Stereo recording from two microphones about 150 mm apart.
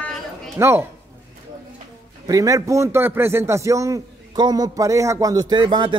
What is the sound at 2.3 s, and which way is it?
Speech, 25° right (ahead or behind).